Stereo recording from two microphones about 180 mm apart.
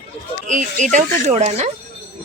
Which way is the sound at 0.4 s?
45° right (ahead or behind).